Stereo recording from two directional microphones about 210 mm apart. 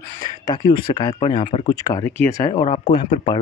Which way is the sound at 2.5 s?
25° left (ahead or behind).